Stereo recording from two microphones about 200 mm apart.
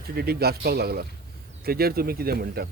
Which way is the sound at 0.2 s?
50° right (ahead or behind).